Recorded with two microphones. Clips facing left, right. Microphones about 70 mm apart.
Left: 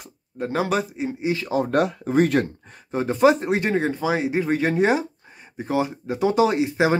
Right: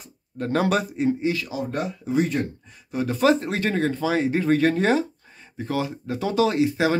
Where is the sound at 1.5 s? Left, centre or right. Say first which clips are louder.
Left 7 dB; left.